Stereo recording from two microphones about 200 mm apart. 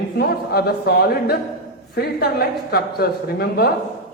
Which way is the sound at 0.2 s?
50° left (ahead or behind).